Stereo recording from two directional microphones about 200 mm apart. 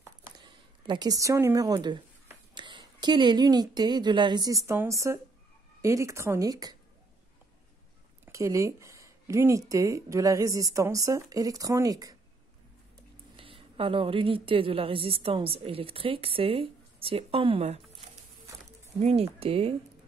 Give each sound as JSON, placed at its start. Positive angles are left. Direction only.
{"t": 0.4, "sound": "a woman's voice", "side_deg": -20}
{"t": 8.3, "sound": "speech", "side_deg": -15}
{"t": 13.4, "sound": "a woman's voice", "side_deg": -25}
{"t": 18.9, "sound": "a woman's voice", "side_deg": -30}